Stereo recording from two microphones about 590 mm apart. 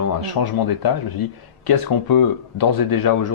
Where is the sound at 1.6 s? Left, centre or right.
Left.